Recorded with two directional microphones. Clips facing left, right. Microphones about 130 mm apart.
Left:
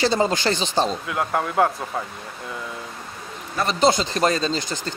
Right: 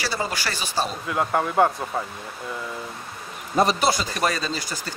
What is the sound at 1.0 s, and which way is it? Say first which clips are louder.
Speech: right 1 dB; centre (ahead or behind).